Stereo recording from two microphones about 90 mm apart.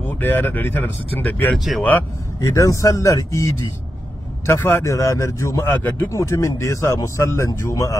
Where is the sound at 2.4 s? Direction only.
35° left (ahead or behind).